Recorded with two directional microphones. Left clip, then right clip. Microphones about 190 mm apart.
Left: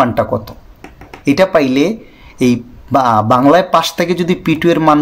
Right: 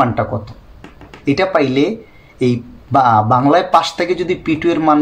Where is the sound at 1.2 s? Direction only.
45° left (ahead or behind).